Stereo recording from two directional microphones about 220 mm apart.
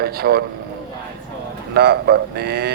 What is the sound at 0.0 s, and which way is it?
Speech, 45° right (ahead or behind).